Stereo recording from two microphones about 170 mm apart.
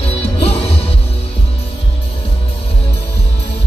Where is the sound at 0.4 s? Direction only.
35° left (ahead or behind).